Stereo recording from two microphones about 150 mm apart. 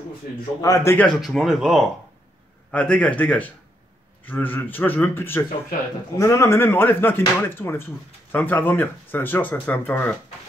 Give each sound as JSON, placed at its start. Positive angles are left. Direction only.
{"t": 0.6, "sound": "a man's voice", "side_deg": 20}
{"t": 0.9, "sound": "speech", "side_deg": 10}
{"t": 1.2, "sound": "speech", "side_deg": 0}
{"t": 2.7, "sound": "speech", "side_deg": 10}